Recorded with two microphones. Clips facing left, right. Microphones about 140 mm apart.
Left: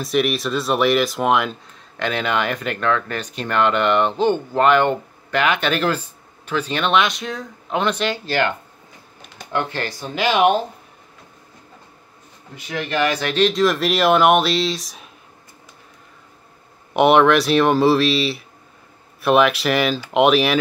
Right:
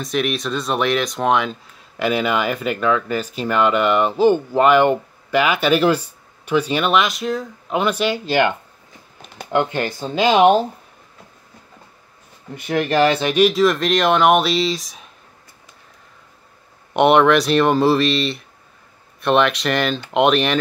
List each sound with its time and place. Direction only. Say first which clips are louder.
0.0 s speech: left 2 dB; centre (ahead or behind); by 10.6 s 30° right (ahead or behind)
12.5 s speech: right 6 dB; 50° right (ahead or behind)
13.0 s speech: right 3 dB; 25° right (ahead or behind)
13.3 s speech: right 2 dB; 5° right (ahead or behind)
16.9 s speech: even; centre (ahead or behind)